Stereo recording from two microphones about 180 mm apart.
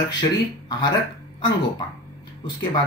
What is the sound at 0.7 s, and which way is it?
Speech, 25° left (ahead or behind).